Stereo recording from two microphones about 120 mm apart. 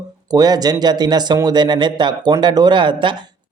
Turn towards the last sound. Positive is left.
turn(degrees=-45)  # may be behind; listen again after turning